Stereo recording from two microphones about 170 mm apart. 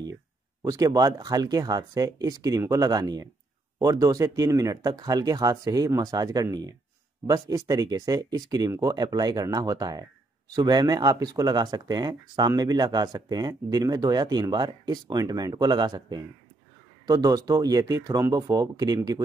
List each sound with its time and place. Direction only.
0.6 s speech: 20° right (ahead or behind)